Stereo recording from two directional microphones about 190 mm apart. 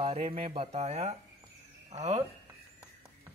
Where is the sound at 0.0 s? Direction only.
30° right (ahead or behind).